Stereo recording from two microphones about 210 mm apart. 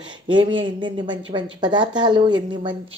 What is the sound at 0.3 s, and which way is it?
A woman's voice, 25° right (ahead or behind).